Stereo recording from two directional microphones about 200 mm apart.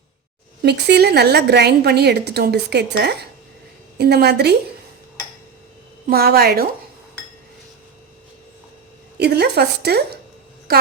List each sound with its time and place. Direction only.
0.6 s a woman's voice: 55° right (ahead or behind)
6.1 s a woman's voice: 50° right (ahead or behind)
9.1 s a woman's voice: 55° right (ahead or behind)